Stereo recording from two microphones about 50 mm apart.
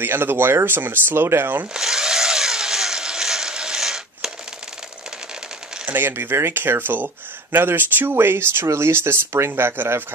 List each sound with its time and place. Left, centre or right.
0.0 s speech: right
1.7 s chainsaw: centre
5.9 s speech: right